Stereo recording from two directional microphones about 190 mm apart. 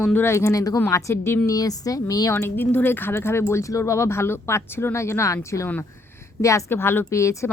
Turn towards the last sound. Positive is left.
turn(degrees=15)  # may be behind; listen again after turning